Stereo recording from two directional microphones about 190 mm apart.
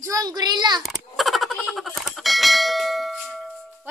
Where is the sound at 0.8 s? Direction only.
Centre (ahead or behind).